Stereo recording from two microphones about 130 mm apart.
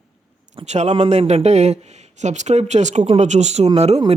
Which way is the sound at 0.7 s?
60° right (ahead or behind).